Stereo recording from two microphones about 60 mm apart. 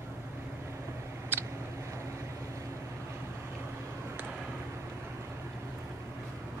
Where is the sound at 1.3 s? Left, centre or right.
Right.